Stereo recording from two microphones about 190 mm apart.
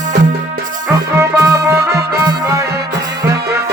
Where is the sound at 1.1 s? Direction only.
15° right (ahead or behind).